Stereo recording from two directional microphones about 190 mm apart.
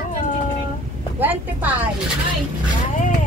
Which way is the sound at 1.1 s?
10° right (ahead or behind).